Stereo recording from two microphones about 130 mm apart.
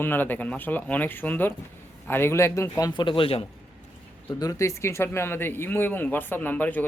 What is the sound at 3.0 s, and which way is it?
Speech, 40° left (ahead or behind).